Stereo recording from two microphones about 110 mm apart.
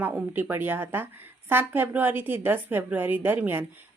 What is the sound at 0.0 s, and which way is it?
A woman's voice, 15° right (ahead or behind).